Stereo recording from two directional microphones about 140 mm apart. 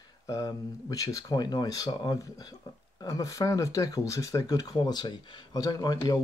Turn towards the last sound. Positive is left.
turn(degrees=30)  # may be behind; listen again after turning